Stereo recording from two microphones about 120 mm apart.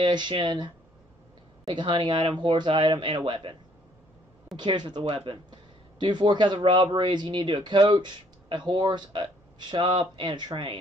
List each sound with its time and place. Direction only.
0.0 s speech: 40° right (ahead or behind)
1.7 s speech: 45° right (ahead or behind)
4.6 s speech: 40° right (ahead or behind)